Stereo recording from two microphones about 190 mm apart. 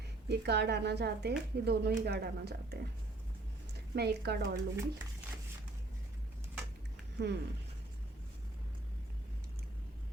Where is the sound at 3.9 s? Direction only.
60° right (ahead or behind).